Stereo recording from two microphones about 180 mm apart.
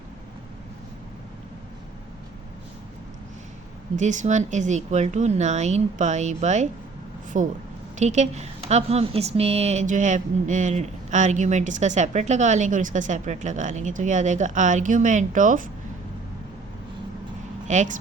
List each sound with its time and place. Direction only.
3.9 s speech: 45° right (ahead or behind)
17.7 s speech: 45° right (ahead or behind)